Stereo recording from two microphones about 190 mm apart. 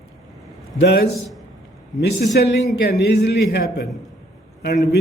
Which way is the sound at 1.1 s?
Centre (ahead or behind).